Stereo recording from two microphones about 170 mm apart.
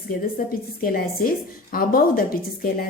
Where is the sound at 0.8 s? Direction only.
60° left (ahead or behind).